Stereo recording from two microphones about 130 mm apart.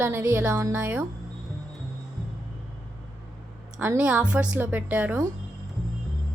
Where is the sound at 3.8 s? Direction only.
10° right (ahead or behind).